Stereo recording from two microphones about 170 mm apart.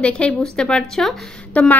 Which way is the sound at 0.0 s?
5° left (ahead or behind).